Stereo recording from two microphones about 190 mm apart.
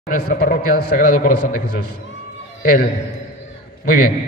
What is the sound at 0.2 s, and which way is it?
A man's voice, 50° left (ahead or behind).